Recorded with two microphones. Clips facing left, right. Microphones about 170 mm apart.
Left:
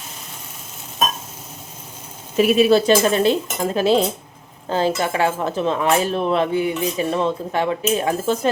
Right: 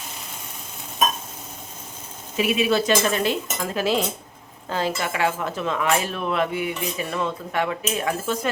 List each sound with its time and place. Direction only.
2.3 s cutlery: 45° left (ahead or behind)
4.7 s speech: 30° left (ahead or behind)